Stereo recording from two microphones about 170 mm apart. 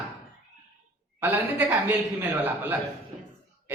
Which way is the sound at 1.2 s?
10° right (ahead or behind).